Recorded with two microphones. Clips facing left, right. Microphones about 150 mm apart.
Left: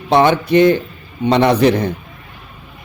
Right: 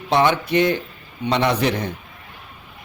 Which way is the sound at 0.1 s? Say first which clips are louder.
Left 6 dB; 35° left (ahead or behind).